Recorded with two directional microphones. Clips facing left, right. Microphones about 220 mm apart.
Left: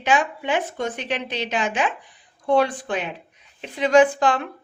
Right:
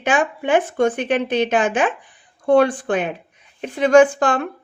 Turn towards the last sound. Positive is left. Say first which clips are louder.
# right 3 dB
turn(degrees=-50)  # may be behind; listen again after turning